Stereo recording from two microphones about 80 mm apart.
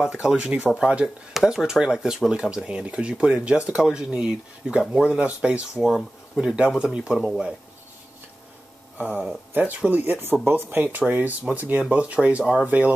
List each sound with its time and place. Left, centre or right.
0.0 s speech: centre
8.9 s speech: right